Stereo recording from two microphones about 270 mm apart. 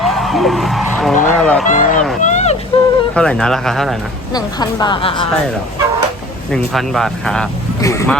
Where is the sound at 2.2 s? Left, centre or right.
Left.